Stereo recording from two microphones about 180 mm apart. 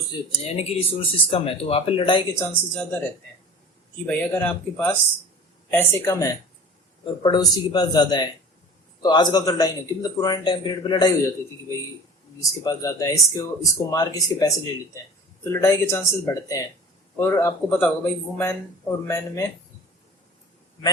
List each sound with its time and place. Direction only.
0.3 s speech: 30° left (ahead or behind)
2.4 s speech: 5° left (ahead or behind)
4.0 s speech: 5° left (ahead or behind); by 11.1 s 25° left (ahead or behind)
12.4 s speech: 20° left (ahead or behind)
15.6 s speech: 15° left (ahead or behind)